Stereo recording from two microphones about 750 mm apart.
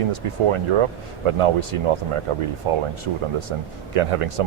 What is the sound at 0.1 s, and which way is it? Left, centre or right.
Speech, right.